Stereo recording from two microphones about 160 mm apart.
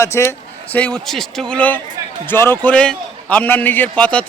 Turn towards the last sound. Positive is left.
turn(degrees=10)  # may be behind; listen again after turning